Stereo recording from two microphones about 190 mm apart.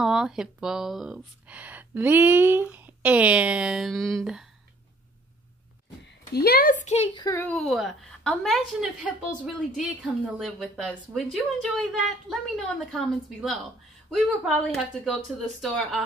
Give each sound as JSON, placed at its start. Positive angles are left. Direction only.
{"t": 0.0, "sound": "a woman's voice", "side_deg": 0}
{"t": 6.3, "sound": "speech", "side_deg": 55}
{"t": 7.2, "sound": "a child's voice", "side_deg": 15}
{"t": 7.5, "sound": "a woman's voice", "side_deg": 0}